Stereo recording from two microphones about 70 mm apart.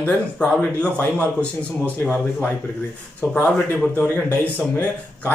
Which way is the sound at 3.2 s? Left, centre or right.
Left.